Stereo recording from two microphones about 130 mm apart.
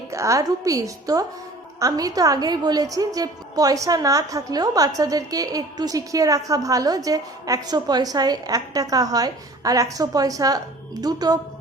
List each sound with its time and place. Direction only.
0.1 s a woman's voice: 25° right (ahead or behind)